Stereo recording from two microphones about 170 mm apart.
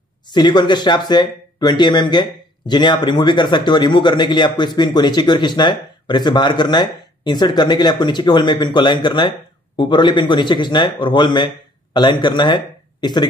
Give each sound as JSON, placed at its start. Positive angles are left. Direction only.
{"t": 0.3, "sound": "speech", "side_deg": 25}